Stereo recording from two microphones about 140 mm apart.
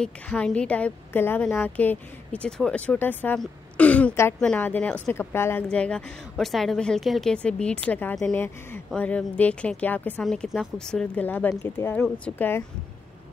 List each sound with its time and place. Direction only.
0.0 s a woman's voice: 5° left (ahead or behind)